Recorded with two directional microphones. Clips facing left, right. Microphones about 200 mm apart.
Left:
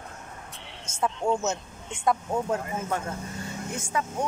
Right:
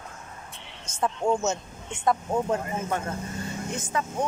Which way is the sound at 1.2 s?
10° right (ahead or behind).